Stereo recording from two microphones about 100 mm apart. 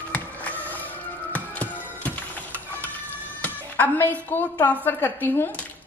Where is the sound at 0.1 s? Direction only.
15° left (ahead or behind).